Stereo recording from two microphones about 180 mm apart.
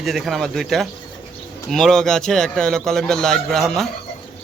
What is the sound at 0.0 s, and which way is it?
Fowl, centre (ahead or behind).